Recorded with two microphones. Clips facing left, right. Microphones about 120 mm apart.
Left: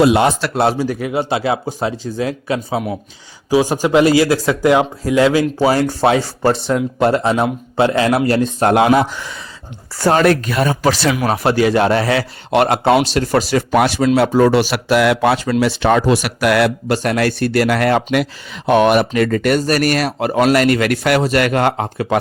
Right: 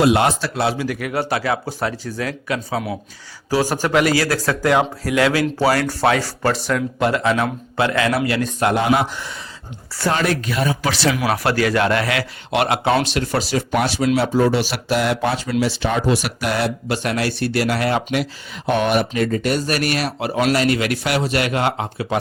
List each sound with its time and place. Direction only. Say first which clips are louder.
0.5 s speech: left 5 dB; 45° left (ahead or behind)
0.9 s speech: left 3 dB; 25° left (ahead or behind)
8.7 s speech: left 7 dB; 90° left
10.0 s speech: left 7 dB; 40° left (ahead or behind)
11.3 s speech: left 4 dB; 25° left (ahead or behind); by 13.7 s 50° left (ahead or behind)
13.7 s a man's voice: left 3 dB; 65° left (ahead or behind)
16.9 s speech: left 5 dB; 45° left (ahead or behind)
19.6 s speech: left 5 dB; 40° left (ahead or behind)